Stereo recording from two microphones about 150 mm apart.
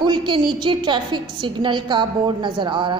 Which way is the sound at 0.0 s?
30° right (ahead or behind).